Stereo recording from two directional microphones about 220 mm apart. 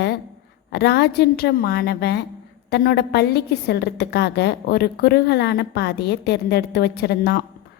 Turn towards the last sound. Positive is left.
turn(degrees=45)  # may be behind; listen again after turning